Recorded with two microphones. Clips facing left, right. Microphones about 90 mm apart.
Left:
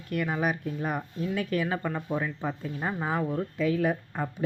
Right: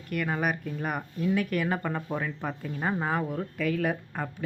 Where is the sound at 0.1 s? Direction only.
5° left (ahead or behind).